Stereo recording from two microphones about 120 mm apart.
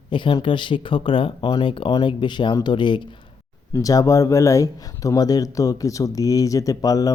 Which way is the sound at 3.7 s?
30° left (ahead or behind).